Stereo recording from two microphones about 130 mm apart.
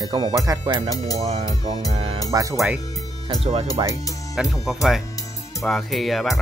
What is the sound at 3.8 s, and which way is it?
Speech, 35° right (ahead or behind).